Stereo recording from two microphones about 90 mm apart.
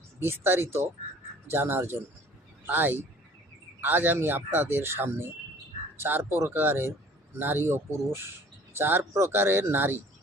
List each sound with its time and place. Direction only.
0.2 s speech: 25° right (ahead or behind)